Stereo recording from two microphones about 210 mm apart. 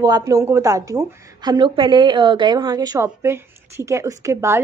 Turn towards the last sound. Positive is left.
turn(degrees=-15)  # may be behind; listen again after turning